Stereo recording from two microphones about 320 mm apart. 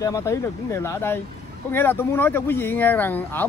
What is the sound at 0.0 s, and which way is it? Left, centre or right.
Speech, centre.